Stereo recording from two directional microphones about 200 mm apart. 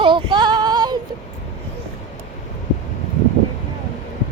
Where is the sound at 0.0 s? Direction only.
25° right (ahead or behind).